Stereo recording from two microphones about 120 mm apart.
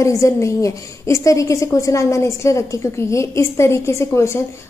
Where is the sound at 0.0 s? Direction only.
25° left (ahead or behind).